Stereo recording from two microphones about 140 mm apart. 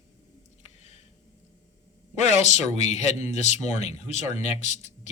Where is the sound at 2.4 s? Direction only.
55° left (ahead or behind).